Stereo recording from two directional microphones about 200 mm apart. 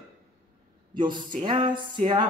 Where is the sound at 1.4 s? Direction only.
25° right (ahead or behind).